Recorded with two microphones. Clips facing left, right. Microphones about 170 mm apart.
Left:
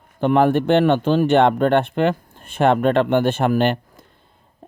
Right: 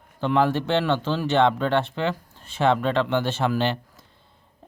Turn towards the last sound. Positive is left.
turn(degrees=55)  # may be behind; listen again after turning